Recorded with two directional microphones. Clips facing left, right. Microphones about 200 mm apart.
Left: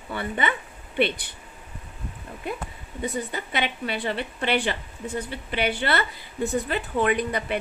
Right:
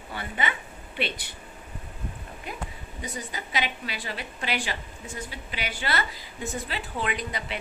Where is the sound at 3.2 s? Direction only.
60° left (ahead or behind).